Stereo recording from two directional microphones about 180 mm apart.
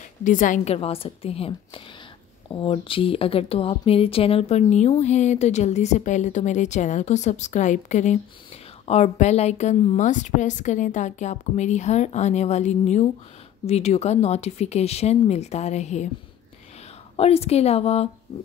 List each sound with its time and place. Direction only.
0.2 s a woman's voice: 45° left (ahead or behind)
0.7 s speech: 35° left (ahead or behind)
17.2 s speech: 35° left (ahead or behind)